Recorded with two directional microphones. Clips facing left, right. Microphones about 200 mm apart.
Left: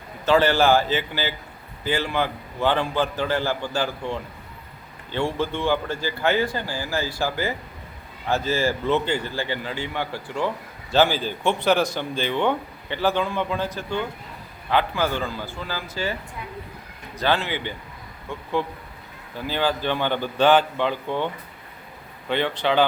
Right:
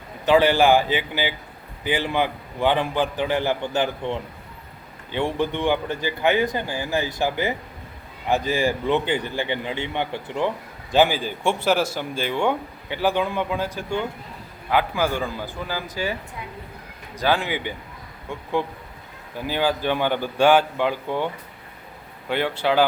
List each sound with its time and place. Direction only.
0.3 s a man's voice: 15° right (ahead or behind)
17.2 s a man's voice: 10° right (ahead or behind)
19.5 s a man's voice: 10° right (ahead or behind)
22.3 s a man's voice: 10° right (ahead or behind)